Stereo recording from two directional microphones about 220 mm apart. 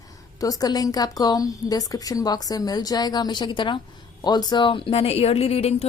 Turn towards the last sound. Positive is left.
turn(degrees=25)  # may be behind; listen again after turning